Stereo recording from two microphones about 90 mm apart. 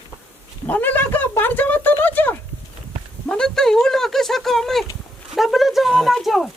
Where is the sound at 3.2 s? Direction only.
10° left (ahead or behind).